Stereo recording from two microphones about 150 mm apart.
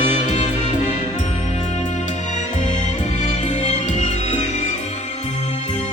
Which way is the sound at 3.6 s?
50° left (ahead or behind).